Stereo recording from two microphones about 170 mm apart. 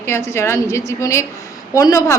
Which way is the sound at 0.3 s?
15° left (ahead or behind).